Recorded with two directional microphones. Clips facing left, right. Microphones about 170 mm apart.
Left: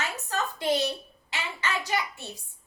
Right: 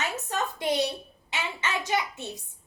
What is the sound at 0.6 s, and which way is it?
A woman's voice, 20° right (ahead or behind).